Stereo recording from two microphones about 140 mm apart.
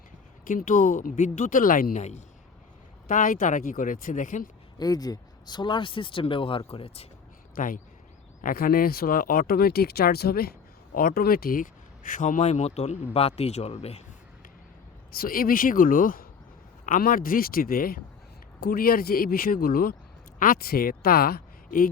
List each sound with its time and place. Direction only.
0.4 s speech: 70° left (ahead or behind)
3.1 s speech: 70° left (ahead or behind)
4.8 s speech: 25° left (ahead or behind); by 7.1 s 45° left (ahead or behind)
7.5 s speech: 75° left (ahead or behind); by 14.0 s 50° left (ahead or behind)
15.1 s speech: 90° left